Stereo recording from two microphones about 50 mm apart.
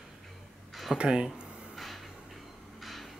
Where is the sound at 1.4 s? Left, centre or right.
Centre.